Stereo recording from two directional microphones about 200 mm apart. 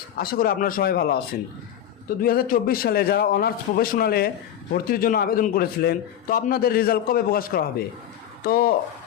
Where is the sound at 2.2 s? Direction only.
45° left (ahead or behind).